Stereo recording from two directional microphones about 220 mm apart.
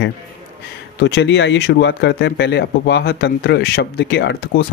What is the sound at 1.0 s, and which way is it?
Speech, 55° left (ahead or behind).